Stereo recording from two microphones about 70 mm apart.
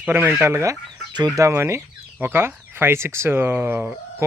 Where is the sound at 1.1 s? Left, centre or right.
Right.